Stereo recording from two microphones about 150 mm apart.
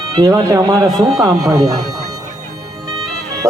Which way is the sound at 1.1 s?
25° right (ahead or behind).